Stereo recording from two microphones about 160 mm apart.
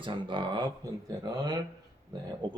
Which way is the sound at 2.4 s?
25° right (ahead or behind).